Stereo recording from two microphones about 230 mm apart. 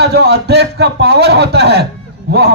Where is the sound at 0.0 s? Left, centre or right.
Right.